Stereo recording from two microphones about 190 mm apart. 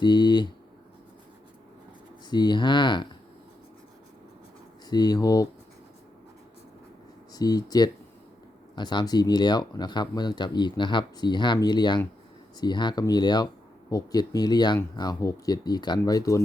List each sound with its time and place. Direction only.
0.0 s speech: 25° left (ahead or behind)
2.3 s speech: 25° left (ahead or behind)
4.9 s speech: 20° left (ahead or behind)
7.3 s speech: 20° left (ahead or behind)